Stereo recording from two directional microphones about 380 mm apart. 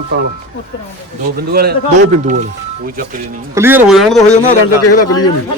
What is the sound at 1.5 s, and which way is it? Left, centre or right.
Speech, right.